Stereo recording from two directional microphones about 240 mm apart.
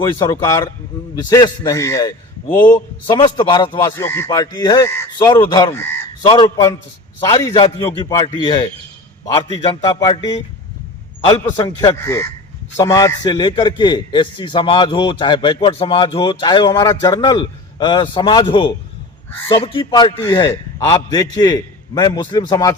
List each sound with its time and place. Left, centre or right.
0.3 s a man's voice: centre